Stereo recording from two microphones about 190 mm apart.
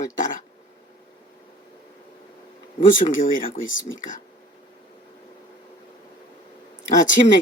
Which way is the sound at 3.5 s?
90° left.